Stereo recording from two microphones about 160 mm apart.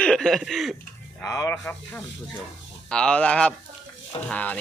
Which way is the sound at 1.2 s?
20° left (ahead or behind).